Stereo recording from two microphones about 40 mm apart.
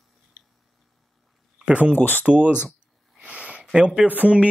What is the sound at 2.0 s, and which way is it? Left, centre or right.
Speech, left.